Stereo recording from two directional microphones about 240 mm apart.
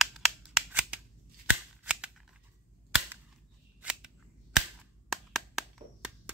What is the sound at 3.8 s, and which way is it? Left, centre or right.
Scissors, centre.